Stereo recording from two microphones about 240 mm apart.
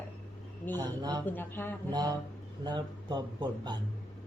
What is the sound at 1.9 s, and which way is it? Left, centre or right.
Speech, centre.